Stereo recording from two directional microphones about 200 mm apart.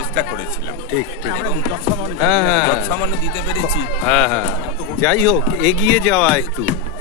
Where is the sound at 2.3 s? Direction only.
Centre (ahead or behind).